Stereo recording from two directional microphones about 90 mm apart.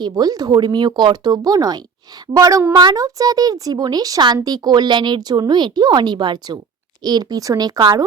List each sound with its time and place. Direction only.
0.0 s a child's voice: 45° right (ahead or behind)